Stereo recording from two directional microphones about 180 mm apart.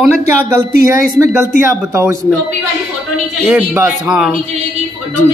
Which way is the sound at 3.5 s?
5° right (ahead or behind).